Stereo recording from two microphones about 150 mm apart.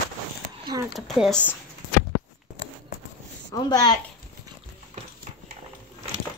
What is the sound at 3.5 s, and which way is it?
Speech, 25° left (ahead or behind).